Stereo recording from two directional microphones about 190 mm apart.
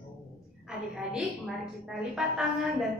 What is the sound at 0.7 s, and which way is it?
A woman's voice, 5° right (ahead or behind).